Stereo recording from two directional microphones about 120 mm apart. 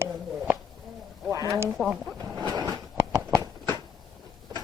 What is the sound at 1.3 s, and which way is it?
Speech, 25° right (ahead or behind).